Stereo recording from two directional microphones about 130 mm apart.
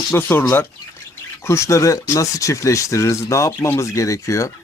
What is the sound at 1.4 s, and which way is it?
Speech, 20° left (ahead or behind).